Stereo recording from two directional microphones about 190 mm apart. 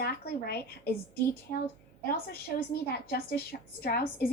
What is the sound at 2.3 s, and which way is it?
A woman's voice, 55° left (ahead or behind).